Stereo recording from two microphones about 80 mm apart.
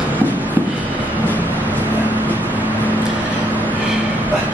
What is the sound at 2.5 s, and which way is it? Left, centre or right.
Vehicle, right.